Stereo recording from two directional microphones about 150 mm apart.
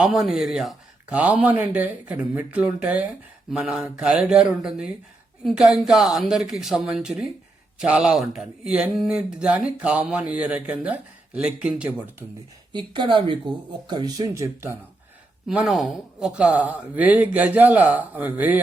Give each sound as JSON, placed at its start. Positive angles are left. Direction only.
{"t": 0.0, "sound": "speech", "side_deg": 0}
{"t": 12.7, "sound": "speech", "side_deg": -30}
{"t": 15.4, "sound": "speech", "side_deg": 0}